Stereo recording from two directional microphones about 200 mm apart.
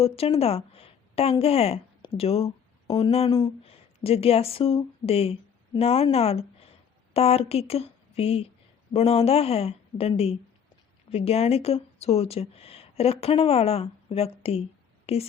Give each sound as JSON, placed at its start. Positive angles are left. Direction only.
{"t": 0.0, "sound": "a woman's voice", "side_deg": 30}